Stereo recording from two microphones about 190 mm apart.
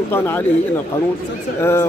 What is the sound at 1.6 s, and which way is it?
Speech, 15° left (ahead or behind).